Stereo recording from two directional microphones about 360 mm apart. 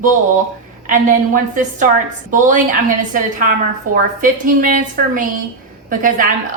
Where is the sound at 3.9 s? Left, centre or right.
Right.